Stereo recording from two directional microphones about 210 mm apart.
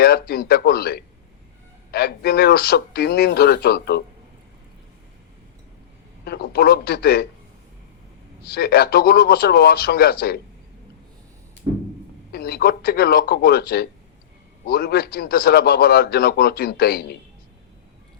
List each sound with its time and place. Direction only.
0.0 s a man's voice: 50° left (ahead or behind)
6.2 s a man's voice: 50° left (ahead or behind)
8.5 s a man's voice: 50° left (ahead or behind)
12.3 s a man's voice: 50° left (ahead or behind)